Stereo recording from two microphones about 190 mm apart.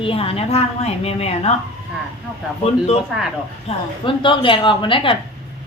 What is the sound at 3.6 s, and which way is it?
A woman's voice, 25° left (ahead or behind).